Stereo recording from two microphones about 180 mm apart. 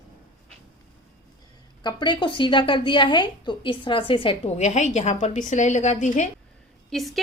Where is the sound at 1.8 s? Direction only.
25° left (ahead or behind); by 6.3 s 40° left (ahead or behind).